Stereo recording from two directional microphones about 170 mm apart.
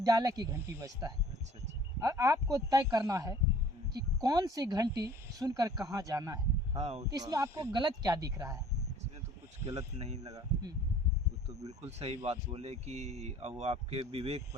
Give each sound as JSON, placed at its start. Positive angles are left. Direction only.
{"t": 0.0, "sound": "speech", "side_deg": -20}
{"t": 6.7, "sound": "speech", "side_deg": -40}
{"t": 7.1, "sound": "speech", "side_deg": -20}
{"t": 10.2, "sound": "speech", "side_deg": -20}
{"t": 11.8, "sound": "speech", "side_deg": -40}